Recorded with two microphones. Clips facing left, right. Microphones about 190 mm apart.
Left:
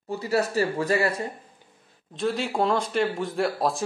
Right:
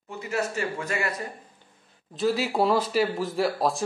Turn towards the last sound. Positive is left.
turn(degrees=0)  # may be behind; listen again after turning